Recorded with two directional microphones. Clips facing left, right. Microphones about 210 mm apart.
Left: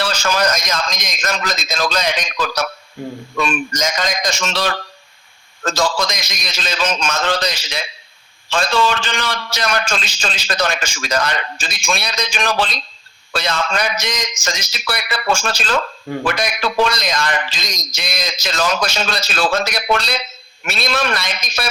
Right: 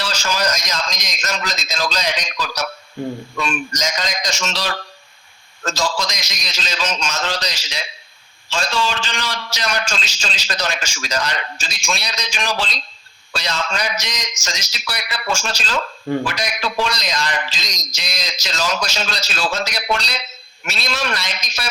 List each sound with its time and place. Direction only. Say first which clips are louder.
0.0 s a man's voice: left 4 dB; 55° left (ahead or behind)
3.0 s speech: right 3 dB; 5° left (ahead or behind)
3.4 s a man's voice: left 4 dB; 55° left (ahead or behind)